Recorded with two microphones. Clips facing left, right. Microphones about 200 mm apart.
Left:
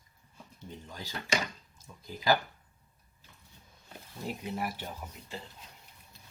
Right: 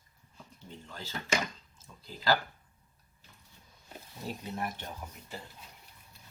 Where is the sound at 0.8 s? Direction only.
15° left (ahead or behind).